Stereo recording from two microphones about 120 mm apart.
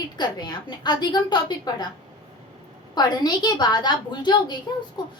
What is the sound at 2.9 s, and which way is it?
A woman's voice, 35° left (ahead or behind).